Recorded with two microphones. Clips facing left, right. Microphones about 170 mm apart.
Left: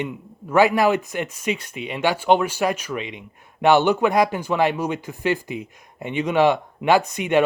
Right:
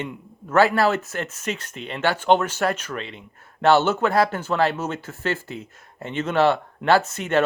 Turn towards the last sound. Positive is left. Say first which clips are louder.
# left 2 dB
turn(degrees=15)  # may be behind; listen again after turning